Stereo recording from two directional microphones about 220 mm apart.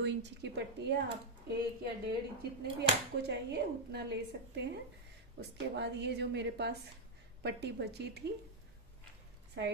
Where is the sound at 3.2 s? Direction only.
50° right (ahead or behind).